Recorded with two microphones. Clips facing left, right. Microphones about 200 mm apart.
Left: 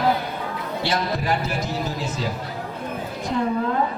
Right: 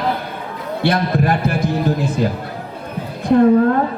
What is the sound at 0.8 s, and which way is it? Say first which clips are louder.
A man's voice: right 8 dB; 55° right (ahead or behind).